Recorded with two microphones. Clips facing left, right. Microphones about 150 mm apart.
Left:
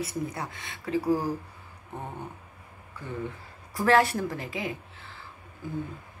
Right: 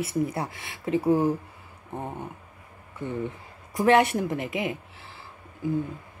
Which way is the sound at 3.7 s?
20° right (ahead or behind).